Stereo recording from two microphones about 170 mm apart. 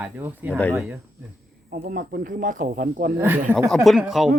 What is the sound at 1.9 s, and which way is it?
Speech, 55° right (ahead or behind).